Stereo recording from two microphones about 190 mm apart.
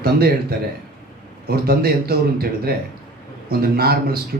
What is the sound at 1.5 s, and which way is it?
Speech, 55° right (ahead or behind).